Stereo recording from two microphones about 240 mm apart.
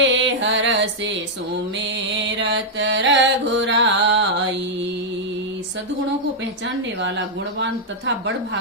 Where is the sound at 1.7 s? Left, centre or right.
Right.